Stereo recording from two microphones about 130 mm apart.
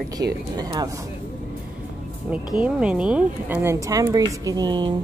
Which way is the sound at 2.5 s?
10° right (ahead or behind).